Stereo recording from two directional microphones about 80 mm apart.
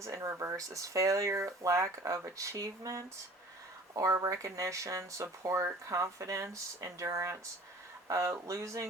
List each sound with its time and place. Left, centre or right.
0.0 s speech: right